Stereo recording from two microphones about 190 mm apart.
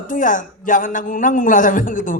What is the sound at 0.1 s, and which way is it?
A man's voice, 45° left (ahead or behind).